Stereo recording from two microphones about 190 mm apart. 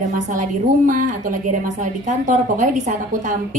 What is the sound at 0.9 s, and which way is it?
A woman's voice, 45° right (ahead or behind).